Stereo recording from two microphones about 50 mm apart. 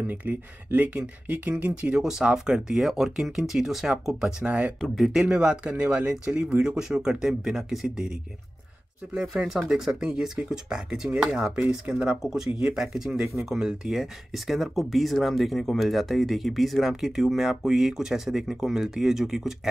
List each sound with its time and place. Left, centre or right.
0.0 s speech: right
2.0 s speech: centre
4.5 s speech: right
4.9 s speech: centre
9.1 s speech: centre
12.2 s speech: centre